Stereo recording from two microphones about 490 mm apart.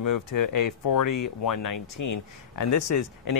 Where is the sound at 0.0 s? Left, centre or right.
Left.